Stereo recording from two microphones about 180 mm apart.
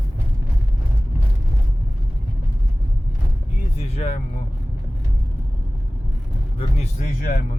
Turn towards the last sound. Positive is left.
turn(degrees=55)  # may be behind; listen again after turning